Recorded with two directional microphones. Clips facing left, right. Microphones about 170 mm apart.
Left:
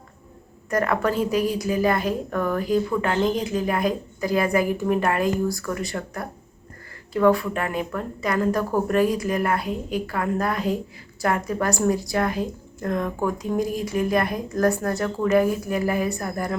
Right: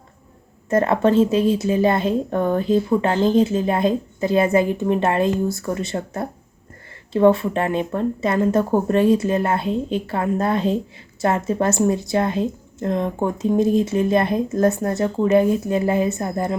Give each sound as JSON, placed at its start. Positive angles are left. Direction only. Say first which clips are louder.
{"t": 0.7, "sound": "a woman's voice", "louder": "right 6 dB", "side_deg": -25}